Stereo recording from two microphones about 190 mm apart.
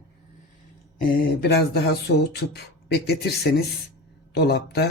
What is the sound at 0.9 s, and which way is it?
Speech, 50° left (ahead or behind).